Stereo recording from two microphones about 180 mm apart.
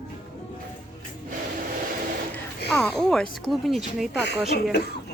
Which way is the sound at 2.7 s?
5° left (ahead or behind).